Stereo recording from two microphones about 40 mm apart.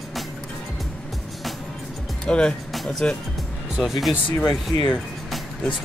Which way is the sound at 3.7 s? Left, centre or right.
Centre.